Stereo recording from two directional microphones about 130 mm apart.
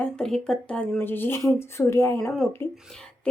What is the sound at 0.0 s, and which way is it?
A woman's voice, 5° left (ahead or behind).